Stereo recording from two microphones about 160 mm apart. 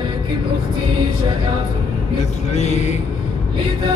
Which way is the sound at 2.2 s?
45° left (ahead or behind).